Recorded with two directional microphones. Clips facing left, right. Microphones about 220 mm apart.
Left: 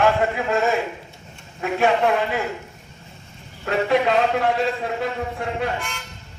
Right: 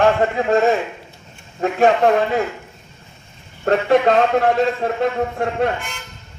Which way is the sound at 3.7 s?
45° right (ahead or behind).